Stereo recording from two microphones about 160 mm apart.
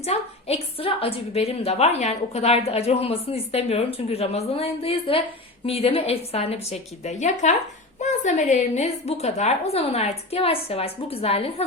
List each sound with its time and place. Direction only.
0.0 s a woman's voice: 40° left (ahead or behind)